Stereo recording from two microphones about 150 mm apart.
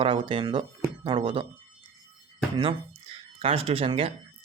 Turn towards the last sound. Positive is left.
turn(degrees=-40)  # may be behind; listen again after turning